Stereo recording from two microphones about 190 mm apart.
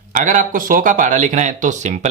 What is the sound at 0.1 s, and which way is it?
Speech, 40° right (ahead or behind).